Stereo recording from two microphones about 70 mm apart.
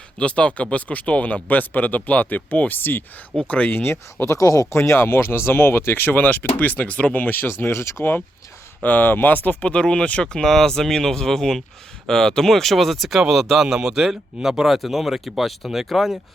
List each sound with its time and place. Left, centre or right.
0.2 s speech: centre
4.3 s speech: left
4.7 s speech: left; by 16.1 s centre